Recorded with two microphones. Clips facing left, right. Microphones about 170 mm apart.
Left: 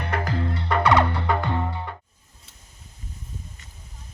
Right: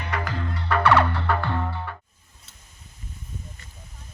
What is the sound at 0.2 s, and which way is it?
Music, 35° left (ahead or behind).